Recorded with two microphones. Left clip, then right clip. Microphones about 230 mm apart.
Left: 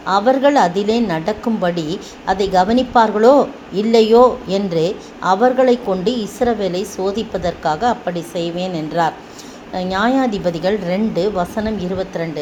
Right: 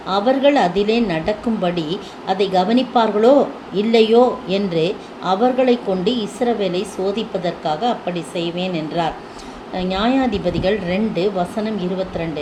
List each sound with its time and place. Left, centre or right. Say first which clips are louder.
0.0 s a woman's voice: left 2 dB; left